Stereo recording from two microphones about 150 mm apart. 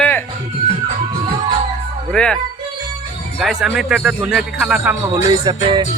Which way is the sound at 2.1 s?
5° left (ahead or behind).